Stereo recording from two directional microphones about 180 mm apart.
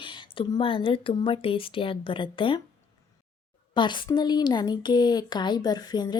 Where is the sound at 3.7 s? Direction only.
25° left (ahead or behind).